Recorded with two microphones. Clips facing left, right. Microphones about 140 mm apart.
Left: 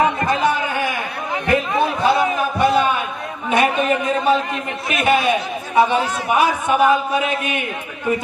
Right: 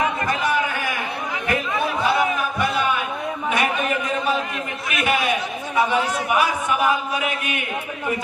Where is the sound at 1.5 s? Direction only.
25° left (ahead or behind).